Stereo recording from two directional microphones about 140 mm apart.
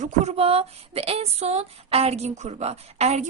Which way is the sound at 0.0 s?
45° right (ahead or behind).